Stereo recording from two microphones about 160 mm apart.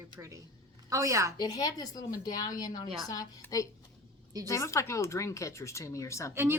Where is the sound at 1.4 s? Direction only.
25° left (ahead or behind).